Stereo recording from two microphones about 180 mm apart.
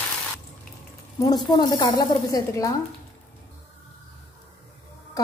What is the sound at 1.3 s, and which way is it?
A woman's voice, 25° left (ahead or behind).